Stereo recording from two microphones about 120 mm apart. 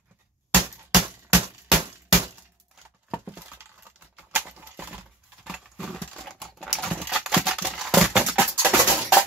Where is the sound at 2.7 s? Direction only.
10° right (ahead or behind).